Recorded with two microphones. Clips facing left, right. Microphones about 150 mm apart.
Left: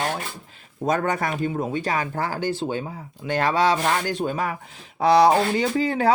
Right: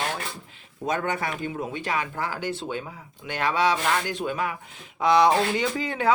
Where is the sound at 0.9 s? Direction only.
40° left (ahead or behind).